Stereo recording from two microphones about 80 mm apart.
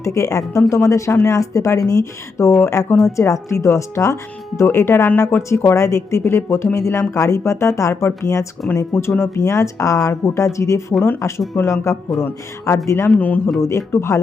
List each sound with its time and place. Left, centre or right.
0.0 s speech: left
13.1 s speech: left
13.6 s speech: left